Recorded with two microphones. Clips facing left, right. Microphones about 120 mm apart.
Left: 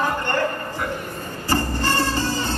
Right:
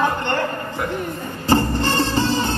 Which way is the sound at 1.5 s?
20° right (ahead or behind).